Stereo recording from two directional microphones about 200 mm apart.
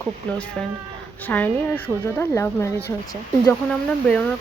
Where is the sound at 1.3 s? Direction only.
10° left (ahead or behind).